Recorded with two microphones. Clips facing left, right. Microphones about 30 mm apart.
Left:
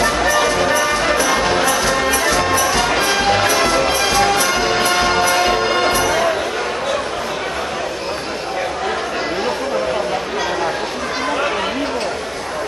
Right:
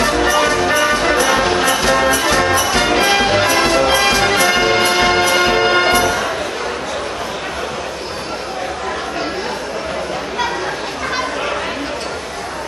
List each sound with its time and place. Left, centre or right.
0.2 s music: right